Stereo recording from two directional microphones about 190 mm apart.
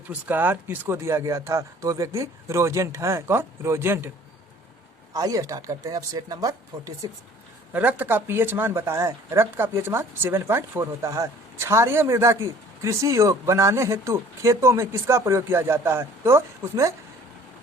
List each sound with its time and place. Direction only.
0.1 s speech: 10° right (ahead or behind)
5.1 s speech: 20° right (ahead or behind)
7.7 s speech: 10° right (ahead or behind)